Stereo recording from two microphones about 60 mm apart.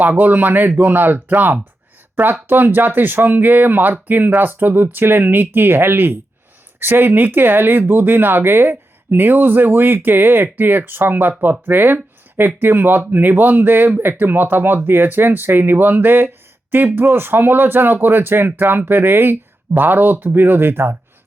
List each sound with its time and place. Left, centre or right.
0.0 s speech: right